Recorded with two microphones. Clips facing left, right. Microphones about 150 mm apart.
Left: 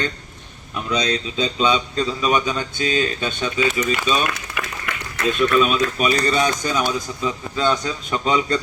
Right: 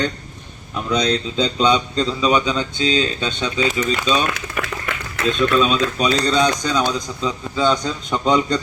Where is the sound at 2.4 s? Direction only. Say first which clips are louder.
Right 3 dB; 20° right (ahead or behind).